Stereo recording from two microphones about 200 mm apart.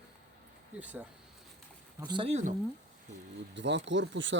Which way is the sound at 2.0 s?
25° right (ahead or behind).